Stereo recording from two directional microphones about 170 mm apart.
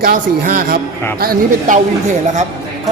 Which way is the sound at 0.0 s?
60° right (ahead or behind).